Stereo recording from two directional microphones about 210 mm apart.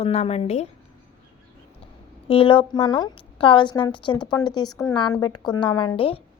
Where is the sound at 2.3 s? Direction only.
25° left (ahead or behind).